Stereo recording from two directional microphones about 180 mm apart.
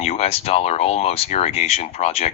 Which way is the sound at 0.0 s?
35° left (ahead or behind).